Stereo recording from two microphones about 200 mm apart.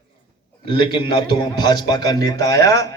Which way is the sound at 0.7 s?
25° left (ahead or behind).